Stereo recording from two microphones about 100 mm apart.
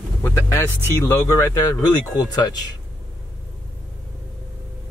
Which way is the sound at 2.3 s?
40° left (ahead or behind).